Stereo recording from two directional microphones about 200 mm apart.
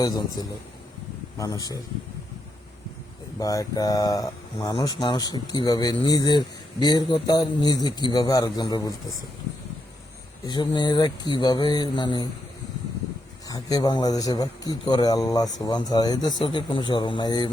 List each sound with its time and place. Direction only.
0.0 s speech: 20° left (ahead or behind)
3.3 s speech: 15° left (ahead or behind)
10.4 s speech: 20° left (ahead or behind)
13.5 s speech: 20° left (ahead or behind)